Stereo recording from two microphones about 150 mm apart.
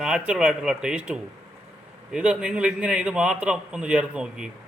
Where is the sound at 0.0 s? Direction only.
5° right (ahead or behind).